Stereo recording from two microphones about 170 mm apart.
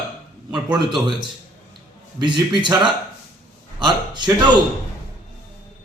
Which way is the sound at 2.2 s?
25° right (ahead or behind).